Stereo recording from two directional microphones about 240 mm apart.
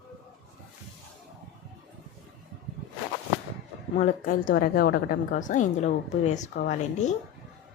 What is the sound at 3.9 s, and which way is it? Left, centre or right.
A woman's voice, left.